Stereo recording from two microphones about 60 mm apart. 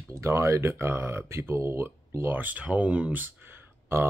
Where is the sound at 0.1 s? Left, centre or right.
Right.